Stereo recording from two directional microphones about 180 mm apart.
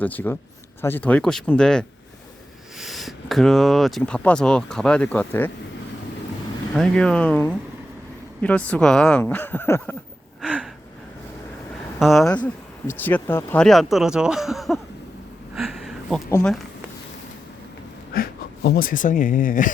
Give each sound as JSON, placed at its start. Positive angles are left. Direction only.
{"t": 0.0, "sound": "speech", "side_deg": 10}
{"t": 6.7, "sound": "speech", "side_deg": 5}
{"t": 10.4, "sound": "gasp", "side_deg": -5}
{"t": 11.9, "sound": "speech", "side_deg": 0}
{"t": 15.5, "sound": "a sound", "side_deg": 0}
{"t": 18.1, "sound": "speech", "side_deg": 60}